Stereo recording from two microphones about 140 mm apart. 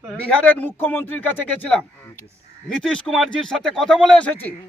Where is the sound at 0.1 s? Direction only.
10° left (ahead or behind).